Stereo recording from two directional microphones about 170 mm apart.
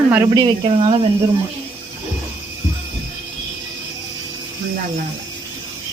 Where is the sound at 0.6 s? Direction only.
35° right (ahead or behind).